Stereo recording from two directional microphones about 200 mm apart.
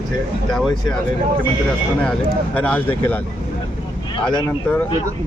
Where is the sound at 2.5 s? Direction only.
5° left (ahead or behind).